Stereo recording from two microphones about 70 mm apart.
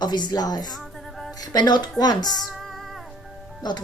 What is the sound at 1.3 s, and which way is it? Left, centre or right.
Speech, left.